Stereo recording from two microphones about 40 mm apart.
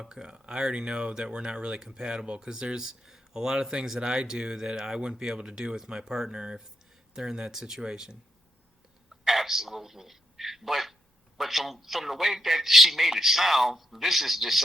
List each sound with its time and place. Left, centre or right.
0.0 s speech: centre
9.2 s a man's voice: centre